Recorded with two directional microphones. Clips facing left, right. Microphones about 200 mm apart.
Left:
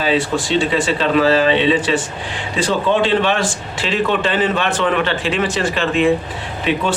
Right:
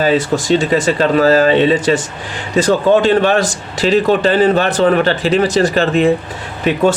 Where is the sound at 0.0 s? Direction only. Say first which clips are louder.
Right 4 dB; 45° right (ahead or behind).